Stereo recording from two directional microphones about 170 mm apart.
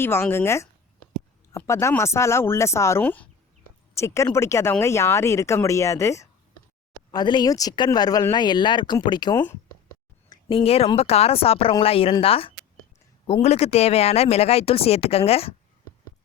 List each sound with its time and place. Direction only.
0.0 s speech: 15° left (ahead or behind)
10.2 s a sound: 25° left (ahead or behind)
10.6 s speech: 35° left (ahead or behind)